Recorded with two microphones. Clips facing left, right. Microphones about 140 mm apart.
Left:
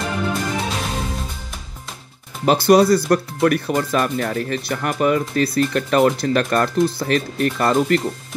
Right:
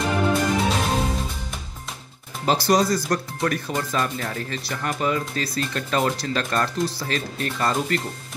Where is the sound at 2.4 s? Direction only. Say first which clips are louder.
Left 6 dB; 60° left (ahead or behind).